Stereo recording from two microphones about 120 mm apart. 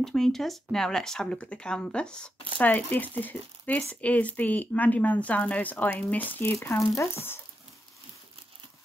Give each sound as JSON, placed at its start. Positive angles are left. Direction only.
{"t": 0.0, "sound": "speech", "side_deg": 0}